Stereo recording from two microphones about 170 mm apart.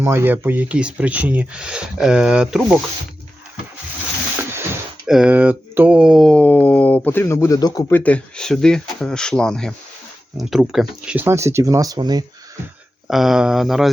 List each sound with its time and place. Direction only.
0.0 s speech: 15° right (ahead or behind)
5.0 s mantra: 5° right (ahead or behind)
10.3 s speech: centre (ahead or behind); by 12.2 s 25° right (ahead or behind)
13.1 s mantra: centre (ahead or behind)